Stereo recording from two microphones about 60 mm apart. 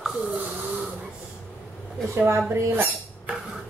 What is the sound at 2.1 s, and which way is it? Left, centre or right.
Speech, right.